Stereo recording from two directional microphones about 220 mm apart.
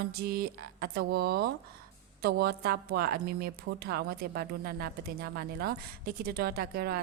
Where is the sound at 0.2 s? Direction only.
45° right (ahead or behind).